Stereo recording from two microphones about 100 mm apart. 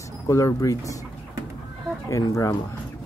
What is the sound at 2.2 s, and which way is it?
Speech, 35° left (ahead or behind).